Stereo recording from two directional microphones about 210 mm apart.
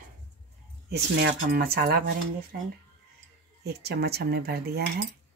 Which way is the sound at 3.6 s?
50° right (ahead or behind).